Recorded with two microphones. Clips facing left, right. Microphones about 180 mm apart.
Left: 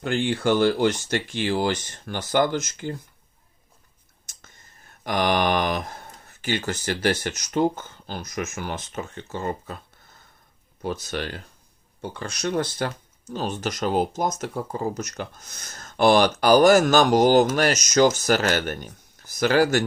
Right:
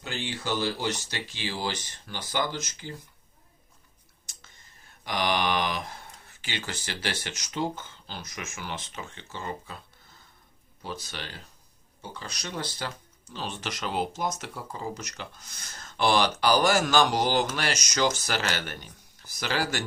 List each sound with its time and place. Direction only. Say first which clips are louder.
0.0 s speech: left 11 dB; 55° left (ahead or behind)
5.0 s speech: left 5 dB; 50° left (ahead or behind)